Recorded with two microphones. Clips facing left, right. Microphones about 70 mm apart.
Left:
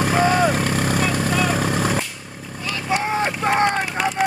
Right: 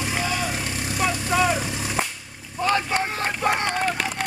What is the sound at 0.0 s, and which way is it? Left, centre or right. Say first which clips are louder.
Vehicle: left 9 dB; left.